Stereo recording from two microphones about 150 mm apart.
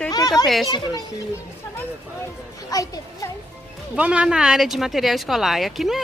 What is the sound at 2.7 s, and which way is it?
Speech, 25° left (ahead or behind).